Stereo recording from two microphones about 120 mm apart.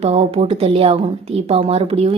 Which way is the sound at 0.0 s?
60° right (ahead or behind).